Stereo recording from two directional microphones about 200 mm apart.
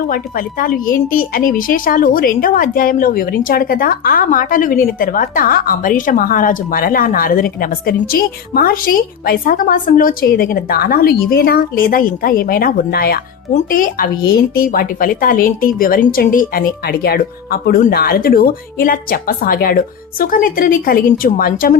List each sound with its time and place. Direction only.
0.1 s a woman's voice: 45° left (ahead or behind)